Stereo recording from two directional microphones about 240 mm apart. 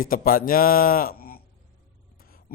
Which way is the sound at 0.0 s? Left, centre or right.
Left.